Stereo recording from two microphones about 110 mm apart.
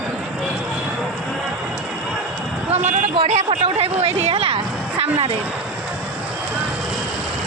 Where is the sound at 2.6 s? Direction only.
75° right (ahead or behind).